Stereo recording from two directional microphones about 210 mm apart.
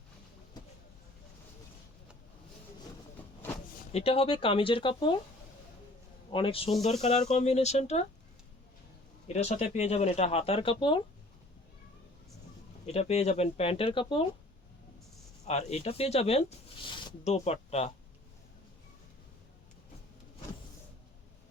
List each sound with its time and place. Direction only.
3.9 s speech: 30° left (ahead or behind)
6.3 s speech: 25° left (ahead or behind)
9.2 s speech: 30° left (ahead or behind)
12.8 s speech: 30° left (ahead or behind)
15.4 s speech: 30° left (ahead or behind)